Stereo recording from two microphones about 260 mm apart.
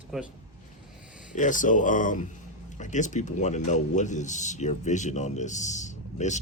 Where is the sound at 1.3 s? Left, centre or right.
Left.